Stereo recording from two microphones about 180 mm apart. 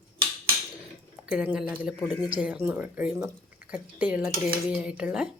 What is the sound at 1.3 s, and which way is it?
Speech, 5° right (ahead or behind).